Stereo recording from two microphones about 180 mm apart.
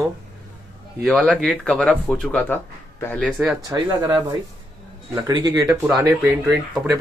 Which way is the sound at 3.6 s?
20° right (ahead or behind).